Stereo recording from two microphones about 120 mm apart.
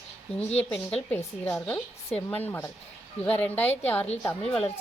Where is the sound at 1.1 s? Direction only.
20° left (ahead or behind).